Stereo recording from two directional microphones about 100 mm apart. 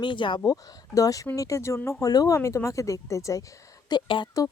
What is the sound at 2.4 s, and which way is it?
Speech, 25° left (ahead or behind).